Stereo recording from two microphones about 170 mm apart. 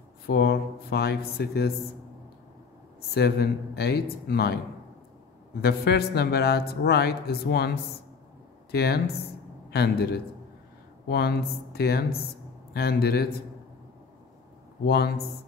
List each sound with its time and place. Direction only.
0.3 s a man's voice: 70° left (ahead or behind)
3.2 s a man's voice: 70° left (ahead or behind)
5.6 s a man's voice: 70° left (ahead or behind)
8.7 s a man's voice: 70° left (ahead or behind)
14.9 s a man's voice: 70° left (ahead or behind)